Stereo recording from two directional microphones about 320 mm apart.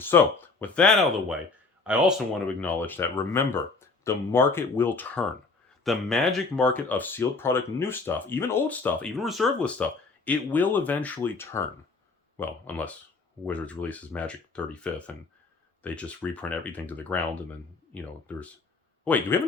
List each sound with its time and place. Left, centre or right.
0.0 s speech: centre